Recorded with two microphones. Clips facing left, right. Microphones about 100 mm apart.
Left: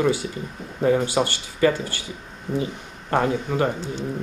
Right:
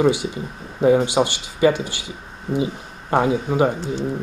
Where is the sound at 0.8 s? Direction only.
20° right (ahead or behind).